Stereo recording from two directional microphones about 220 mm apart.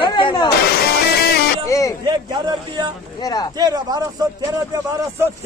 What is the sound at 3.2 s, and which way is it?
Speech, 20° left (ahead or behind).